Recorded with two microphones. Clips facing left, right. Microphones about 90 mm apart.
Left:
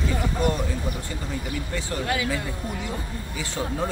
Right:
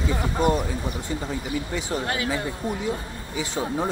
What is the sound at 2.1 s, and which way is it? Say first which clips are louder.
Speech: left 3 dB; 30° right (ahead or behind).